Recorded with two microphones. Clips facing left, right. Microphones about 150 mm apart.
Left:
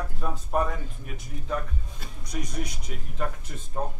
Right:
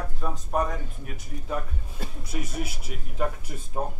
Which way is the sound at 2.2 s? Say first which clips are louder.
Even; 5° right (ahead or behind).